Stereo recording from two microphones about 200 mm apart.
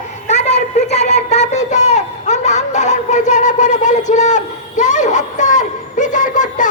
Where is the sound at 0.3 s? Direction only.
35° left (ahead or behind).